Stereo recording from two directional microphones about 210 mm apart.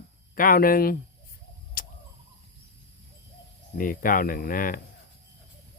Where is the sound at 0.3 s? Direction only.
40° left (ahead or behind).